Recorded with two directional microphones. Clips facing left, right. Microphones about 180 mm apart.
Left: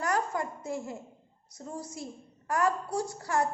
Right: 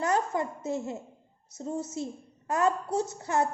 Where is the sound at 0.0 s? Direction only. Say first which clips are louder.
Right 3 dB; 25° right (ahead or behind).